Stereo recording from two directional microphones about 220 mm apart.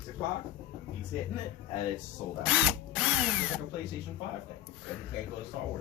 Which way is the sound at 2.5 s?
5° right (ahead or behind).